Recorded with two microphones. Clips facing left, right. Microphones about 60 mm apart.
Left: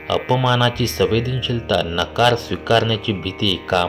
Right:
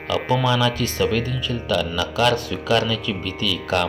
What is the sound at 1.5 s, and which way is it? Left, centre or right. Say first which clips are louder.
Speech: left 3 dB; left.